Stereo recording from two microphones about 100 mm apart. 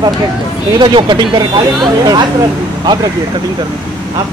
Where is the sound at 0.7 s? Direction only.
50° right (ahead or behind).